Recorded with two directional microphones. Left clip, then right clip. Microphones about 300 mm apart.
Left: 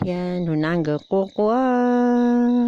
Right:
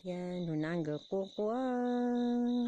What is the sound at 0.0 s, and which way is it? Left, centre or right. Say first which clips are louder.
Speech: left 15 dB; left.